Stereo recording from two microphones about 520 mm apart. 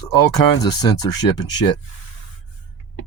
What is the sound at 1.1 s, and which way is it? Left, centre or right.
Speech, left.